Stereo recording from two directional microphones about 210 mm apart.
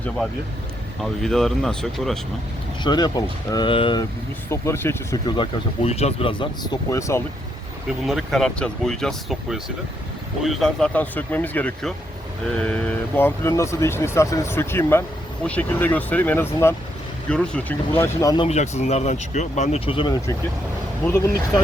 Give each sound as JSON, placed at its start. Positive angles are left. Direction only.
{"t": 1.0, "sound": "speech", "side_deg": 0}
{"t": 2.8, "sound": "speech", "side_deg": 20}
{"t": 4.4, "sound": "speech", "side_deg": 15}
{"t": 8.0, "sound": "speech", "side_deg": 0}
{"t": 18.4, "sound": "speech", "side_deg": 30}